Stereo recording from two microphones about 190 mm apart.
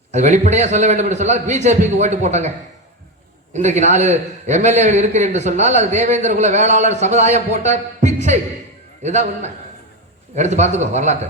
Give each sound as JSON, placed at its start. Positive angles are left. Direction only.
{"t": 0.1, "sound": "a man's voice", "side_deg": -40}
{"t": 3.5, "sound": "a man's voice", "side_deg": -35}